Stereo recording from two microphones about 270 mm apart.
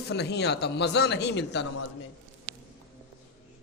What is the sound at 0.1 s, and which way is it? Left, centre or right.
Speech, left.